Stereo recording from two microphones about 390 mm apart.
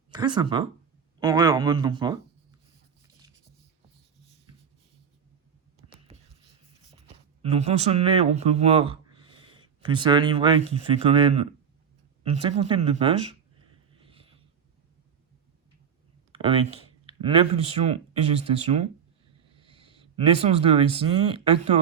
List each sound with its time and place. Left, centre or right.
0.1 s speech: centre
7.4 s a man's voice: centre
14.0 s a sound: centre
16.3 s speech: centre
19.5 s a sound: centre
21.3 s speech: centre